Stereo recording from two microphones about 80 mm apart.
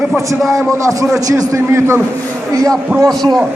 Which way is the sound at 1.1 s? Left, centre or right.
Right.